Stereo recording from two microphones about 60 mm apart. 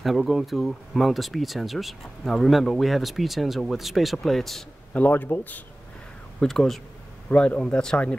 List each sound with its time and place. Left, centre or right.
0.0 s speech: centre
4.9 s speech: left
6.4 s speech: centre
7.2 s a man's voice: centre